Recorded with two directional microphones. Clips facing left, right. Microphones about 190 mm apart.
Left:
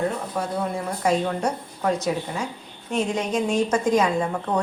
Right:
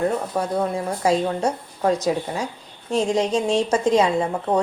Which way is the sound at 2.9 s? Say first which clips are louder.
Right 4 dB; 30° right (ahead or behind).